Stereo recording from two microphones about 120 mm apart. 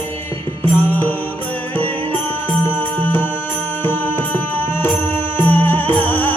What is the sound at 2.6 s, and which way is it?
Music, 15° left (ahead or behind).